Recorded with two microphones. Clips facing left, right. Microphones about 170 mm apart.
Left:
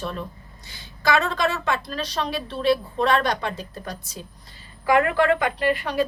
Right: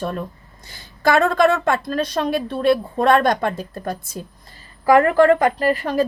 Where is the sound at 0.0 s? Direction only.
50° right (ahead or behind).